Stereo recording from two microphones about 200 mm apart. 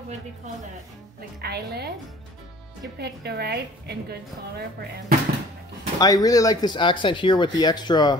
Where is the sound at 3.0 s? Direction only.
55° right (ahead or behind).